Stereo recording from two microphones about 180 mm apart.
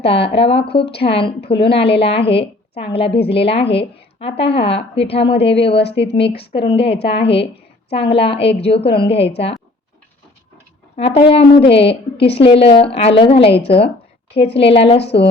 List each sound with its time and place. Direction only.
0.0 s a woman's voice: 30° left (ahead or behind)
11.1 s a woman's voice: 30° left (ahead or behind)
14.3 s a woman's voice: 70° left (ahead or behind)
14.6 s a woman's voice: 35° left (ahead or behind)